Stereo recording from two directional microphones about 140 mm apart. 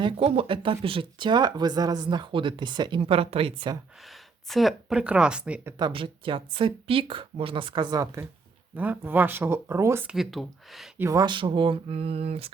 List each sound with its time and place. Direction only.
0.0 s speech: 45° right (ahead or behind)
3.0 s a woman's voice: 45° right (ahead or behind)
4.4 s speech: centre (ahead or behind)
5.8 s speech: 40° right (ahead or behind); by 8.3 s 25° right (ahead or behind)
8.7 s speech: 10° right (ahead or behind)
10.1 s speech: centre (ahead or behind)
10.9 s speech: 15° right (ahead or behind)
11.2 s speech: 35° right (ahead or behind)